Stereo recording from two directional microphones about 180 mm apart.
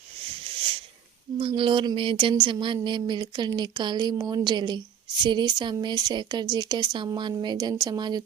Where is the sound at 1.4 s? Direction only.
30° right (ahead or behind).